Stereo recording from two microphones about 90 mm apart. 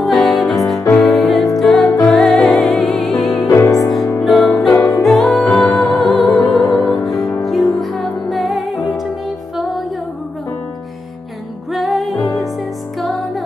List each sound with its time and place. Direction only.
0.0 s music: centre (ahead or behind)
3.3 s music: 40° left (ahead or behind)
3.8 s music: centre (ahead or behind)
4.7 s music: 35° left (ahead or behind)
5.0 s music: centre (ahead or behind)
11.7 s music: centre (ahead or behind)